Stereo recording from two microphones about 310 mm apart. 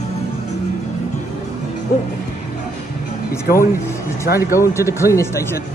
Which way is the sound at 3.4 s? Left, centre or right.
Left.